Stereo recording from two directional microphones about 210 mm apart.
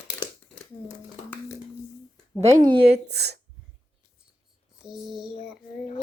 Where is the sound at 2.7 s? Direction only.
50° right (ahead or behind).